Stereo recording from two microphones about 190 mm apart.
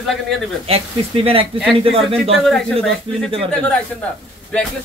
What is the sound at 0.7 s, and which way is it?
Speech, 30° right (ahead or behind).